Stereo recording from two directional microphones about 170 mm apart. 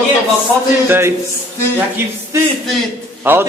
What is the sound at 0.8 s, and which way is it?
Speech, 15° right (ahead or behind).